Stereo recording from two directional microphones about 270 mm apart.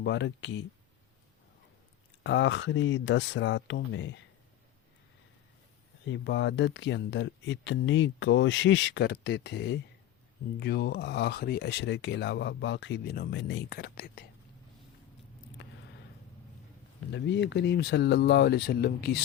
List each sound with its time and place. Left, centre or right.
0.0 s speech: left
2.2 s speech: left
6.1 s speech: left
17.1 s speech: left